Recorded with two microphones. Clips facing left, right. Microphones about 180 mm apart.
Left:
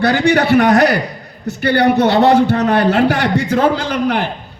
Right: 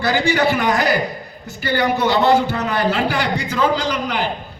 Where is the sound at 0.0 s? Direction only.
65° left (ahead or behind).